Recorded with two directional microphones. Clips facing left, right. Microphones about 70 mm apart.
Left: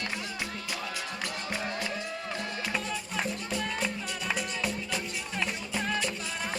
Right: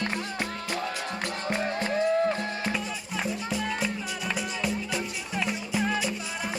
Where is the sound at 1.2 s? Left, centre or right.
Right.